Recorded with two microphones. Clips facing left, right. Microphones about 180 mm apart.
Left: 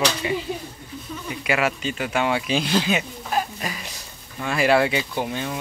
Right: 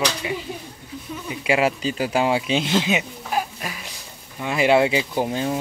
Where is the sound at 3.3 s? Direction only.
5° right (ahead or behind).